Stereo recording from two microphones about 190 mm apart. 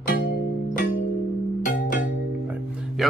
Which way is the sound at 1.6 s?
45° left (ahead or behind).